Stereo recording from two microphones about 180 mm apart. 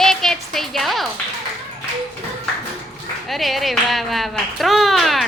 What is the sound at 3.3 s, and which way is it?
Speech, centre (ahead or behind).